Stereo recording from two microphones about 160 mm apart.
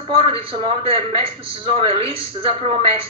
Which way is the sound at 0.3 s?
40° right (ahead or behind).